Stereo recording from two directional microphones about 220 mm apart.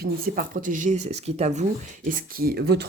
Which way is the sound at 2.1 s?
40° right (ahead or behind).